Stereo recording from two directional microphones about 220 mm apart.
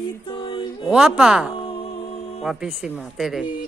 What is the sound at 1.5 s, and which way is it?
Music, 25° left (ahead or behind).